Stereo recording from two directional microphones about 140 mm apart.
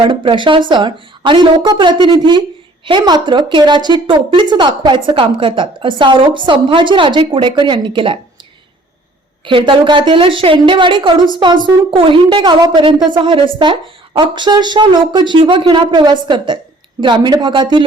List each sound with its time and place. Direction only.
0.0 s a woman's voice: 35° right (ahead or behind)
9.5 s a woman's voice: 35° right (ahead or behind)